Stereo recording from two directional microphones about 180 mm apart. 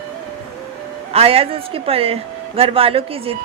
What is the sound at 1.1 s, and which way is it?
A woman's voice, 35° right (ahead or behind).